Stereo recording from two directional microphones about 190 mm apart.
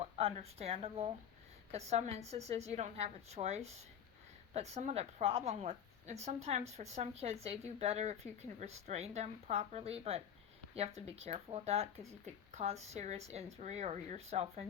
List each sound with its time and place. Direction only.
0.0 s a woman's voice: 30° right (ahead or behind)